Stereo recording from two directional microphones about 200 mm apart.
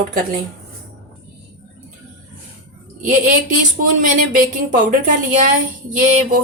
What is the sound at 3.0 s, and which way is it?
Speech, 40° right (ahead or behind).